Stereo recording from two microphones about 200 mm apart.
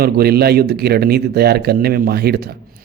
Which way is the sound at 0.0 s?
50° right (ahead or behind).